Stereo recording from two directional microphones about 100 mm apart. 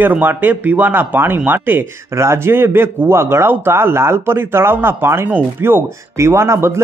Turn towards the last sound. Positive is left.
turn(degrees=-25)  # may be behind; listen again after turning